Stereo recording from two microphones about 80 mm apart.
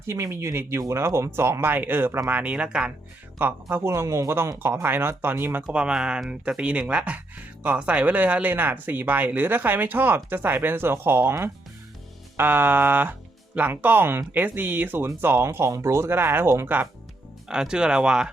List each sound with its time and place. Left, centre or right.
0.1 s speech: right
2.4 s speech: centre
3.3 s speech: right
3.9 s speech: right
5.7 s speech: centre; by 16.7 s right
17.5 s speech: centre